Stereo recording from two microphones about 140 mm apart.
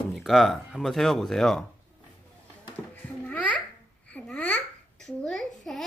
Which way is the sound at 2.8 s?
Centre (ahead or behind).